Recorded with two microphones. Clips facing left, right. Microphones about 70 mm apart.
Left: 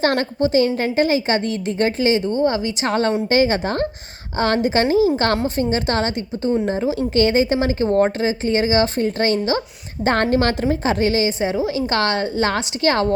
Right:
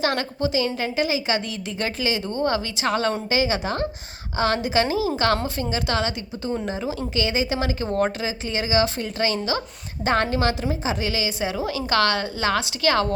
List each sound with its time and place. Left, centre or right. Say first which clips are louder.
0.0 s a woman's voice: left 5 dB; left
2.3 s speech: left 5 dB; left
2.8 s a woman's voice: left 5 dB; left